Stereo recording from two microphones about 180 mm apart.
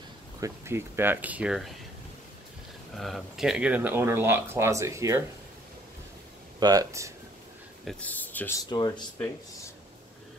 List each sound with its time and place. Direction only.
0.4 s speech: 15° right (ahead or behind)
3.0 s speech: centre (ahead or behind); by 5.2 s 15° right (ahead or behind)
6.6 s speech: 20° right (ahead or behind)
7.8 s speech: 10° left (ahead or behind)
8.6 s speech: 25° left (ahead or behind)